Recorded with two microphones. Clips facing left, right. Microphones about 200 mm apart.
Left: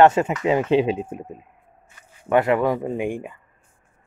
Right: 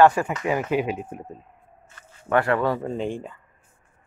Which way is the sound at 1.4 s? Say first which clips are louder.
Even; 10° left (ahead or behind).